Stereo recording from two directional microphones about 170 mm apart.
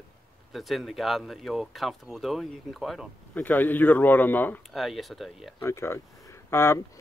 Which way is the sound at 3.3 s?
10° left (ahead or behind).